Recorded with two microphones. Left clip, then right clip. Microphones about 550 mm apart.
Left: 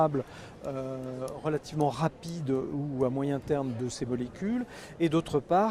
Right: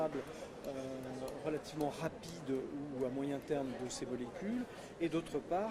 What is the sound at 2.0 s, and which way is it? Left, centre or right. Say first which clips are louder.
Speech: left 10 dB; left.